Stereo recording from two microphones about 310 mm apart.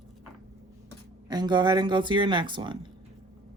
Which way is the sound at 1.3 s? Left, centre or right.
Centre.